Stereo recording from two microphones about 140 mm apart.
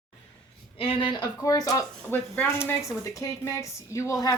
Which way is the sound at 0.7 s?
40° left (ahead or behind).